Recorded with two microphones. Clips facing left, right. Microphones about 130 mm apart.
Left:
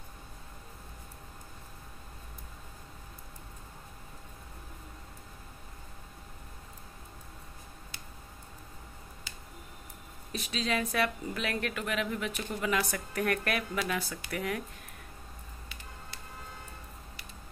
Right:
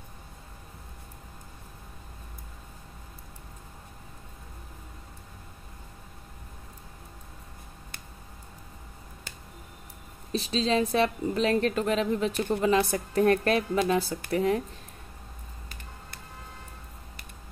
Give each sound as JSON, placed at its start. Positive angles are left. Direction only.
{"t": 10.3, "sound": "a woman's voice", "side_deg": -30}